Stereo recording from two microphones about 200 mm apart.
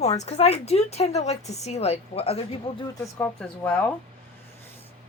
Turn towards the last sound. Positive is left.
turn(degrees=10)  # may be behind; listen again after turning